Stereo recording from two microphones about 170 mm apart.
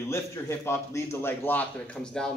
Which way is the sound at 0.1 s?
15° left (ahead or behind).